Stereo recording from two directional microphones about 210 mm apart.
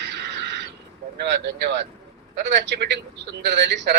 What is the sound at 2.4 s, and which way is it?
Speech, 55° right (ahead or behind).